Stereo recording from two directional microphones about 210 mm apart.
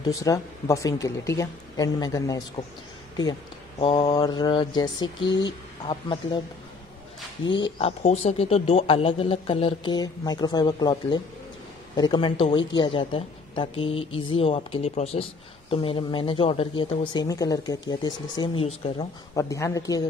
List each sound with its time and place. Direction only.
0.1 s speech: 15° left (ahead or behind)
3.8 s speech: 20° left (ahead or behind)
5.2 s speech: 60° left (ahead or behind)
7.5 s speech: 25° left (ahead or behind)
19.3 s speech: 15° left (ahead or behind)